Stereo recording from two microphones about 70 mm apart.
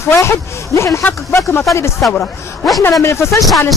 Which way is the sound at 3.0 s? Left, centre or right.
Left.